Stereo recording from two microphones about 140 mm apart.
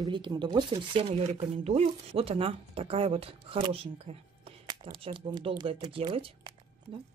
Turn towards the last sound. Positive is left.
turn(degrees=-40)  # may be behind; listen again after turning